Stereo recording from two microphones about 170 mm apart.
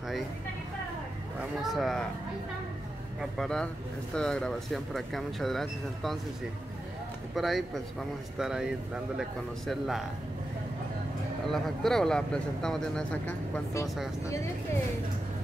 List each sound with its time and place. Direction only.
1.4 s speech: centre (ahead or behind)
3.2 s speech: centre (ahead or behind)
7.3 s speech: centre (ahead or behind)
11.4 s speech: centre (ahead or behind)